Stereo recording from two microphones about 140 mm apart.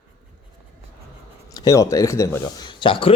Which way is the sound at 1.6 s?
25° left (ahead or behind).